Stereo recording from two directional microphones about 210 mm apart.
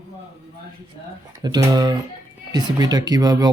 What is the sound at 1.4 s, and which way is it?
Speech, 20° right (ahead or behind).